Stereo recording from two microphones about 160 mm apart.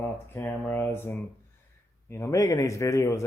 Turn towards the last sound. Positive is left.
turn(degrees=20)  # may be behind; listen again after turning